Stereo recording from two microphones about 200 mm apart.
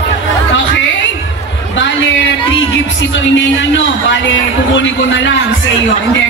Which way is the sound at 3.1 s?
65° left (ahead or behind).